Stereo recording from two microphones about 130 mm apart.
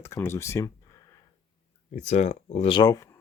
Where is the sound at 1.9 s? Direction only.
60° left (ahead or behind).